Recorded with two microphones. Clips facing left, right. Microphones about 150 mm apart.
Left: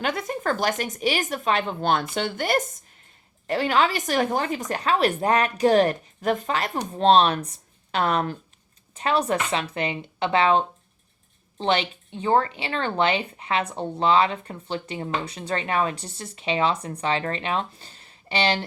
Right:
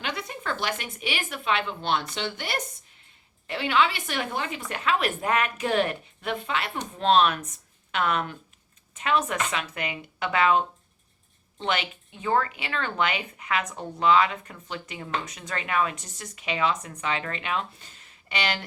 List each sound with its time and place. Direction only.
0.0 s a woman's voice: 45° left (ahead or behind); by 18.6 s 30° left (ahead or behind)